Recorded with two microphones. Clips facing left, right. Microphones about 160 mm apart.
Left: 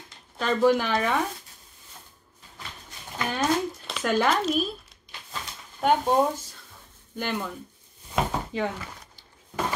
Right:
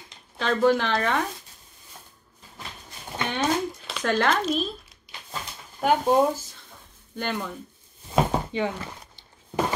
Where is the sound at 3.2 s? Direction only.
Centre (ahead or behind).